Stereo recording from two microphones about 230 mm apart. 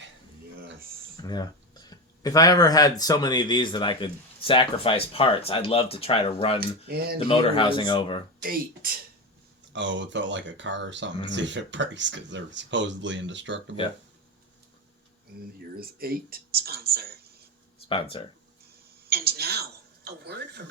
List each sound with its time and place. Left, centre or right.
1.1 s a sound: centre
3.0 s speech: centre
6.6 s speech: right
7.3 s speech: left
8.4 s speech: right
9.7 s speech: right
15.8 s speech: right
17.8 s speech: left
19.0 s speech: right